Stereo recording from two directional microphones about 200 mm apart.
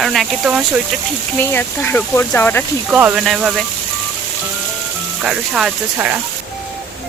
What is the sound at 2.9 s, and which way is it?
Speech, 5° right (ahead or behind).